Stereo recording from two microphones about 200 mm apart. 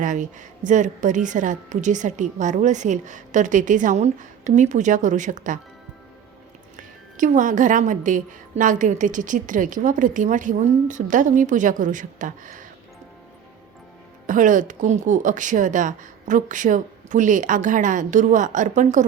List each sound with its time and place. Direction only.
0.0 s a woman's voice: 40° right (ahead or behind)
6.7 s a woman's voice: 40° right (ahead or behind)
14.3 s a woman's voice: 40° right (ahead or behind)